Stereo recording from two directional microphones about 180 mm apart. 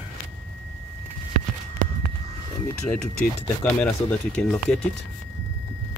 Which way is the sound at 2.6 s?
5° left (ahead or behind).